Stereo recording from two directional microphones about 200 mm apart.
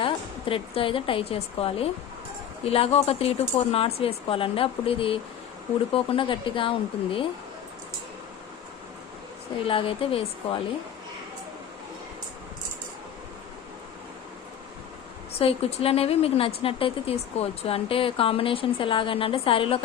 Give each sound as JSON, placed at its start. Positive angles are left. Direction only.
{"t": 0.0, "sound": "a woman's voice", "side_deg": 25}
{"t": 9.6, "sound": "speech", "side_deg": 25}
{"t": 15.4, "sound": "speech", "side_deg": 30}